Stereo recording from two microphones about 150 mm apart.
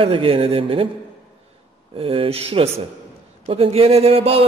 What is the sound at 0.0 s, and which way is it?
Speech, 40° right (ahead or behind).